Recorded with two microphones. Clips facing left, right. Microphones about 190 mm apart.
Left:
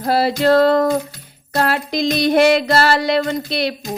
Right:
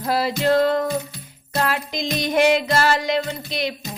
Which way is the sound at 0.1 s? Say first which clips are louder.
Left 5 dB; 35° left (ahead or behind).